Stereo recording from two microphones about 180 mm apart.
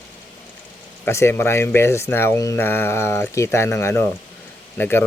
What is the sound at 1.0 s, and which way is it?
Speech, 15° left (ahead or behind).